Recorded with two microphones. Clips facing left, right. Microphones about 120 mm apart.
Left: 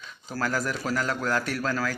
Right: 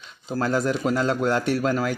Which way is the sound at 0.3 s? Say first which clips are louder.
Right 6 dB; 25° right (ahead or behind).